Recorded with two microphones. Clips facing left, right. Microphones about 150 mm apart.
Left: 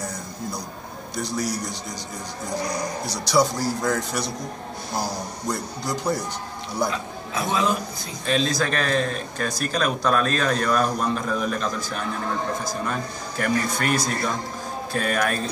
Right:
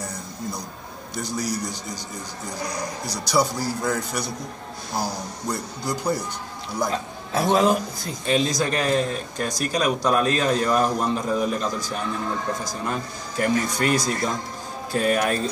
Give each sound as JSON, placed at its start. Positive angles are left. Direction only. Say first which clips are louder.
{"t": 1.2, "sound": "a man's voice", "louder": "left 1 dB", "side_deg": 0}
{"t": 3.3, "sound": "a man's voice", "louder": "left 2 dB", "side_deg": 0}
{"t": 5.5, "sound": "a man's voice", "louder": "even", "side_deg": 0}
{"t": 6.9, "sound": "a man's voice", "louder": "right 2 dB", "side_deg": -40}
{"t": 8.3, "sound": "a man's voice", "louder": "right 1 dB", "side_deg": -15}